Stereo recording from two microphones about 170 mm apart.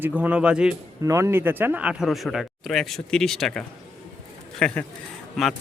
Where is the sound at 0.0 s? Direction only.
10° right (ahead or behind).